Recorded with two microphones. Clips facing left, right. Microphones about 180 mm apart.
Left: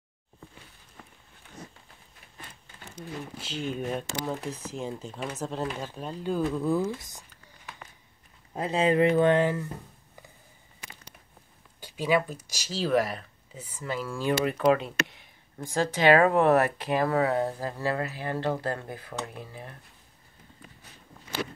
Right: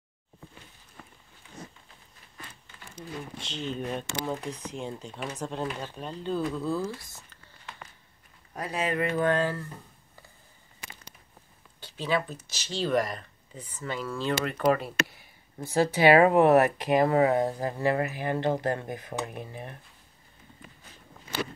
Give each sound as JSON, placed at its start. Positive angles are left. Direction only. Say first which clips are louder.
{"t": 3.3, "sound": "speech", "louder": "left 2 dB", "side_deg": 5}
{"t": 8.5, "sound": "speech", "louder": "left 6 dB", "side_deg": 25}
{"t": 11.8, "sound": "speech", "louder": "left 3 dB", "side_deg": 10}